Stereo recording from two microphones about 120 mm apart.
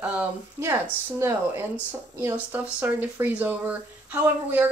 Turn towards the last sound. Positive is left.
turn(degrees=-15)  # may be behind; listen again after turning